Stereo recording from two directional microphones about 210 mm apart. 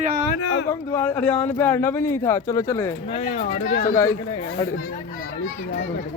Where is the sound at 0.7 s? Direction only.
10° left (ahead or behind).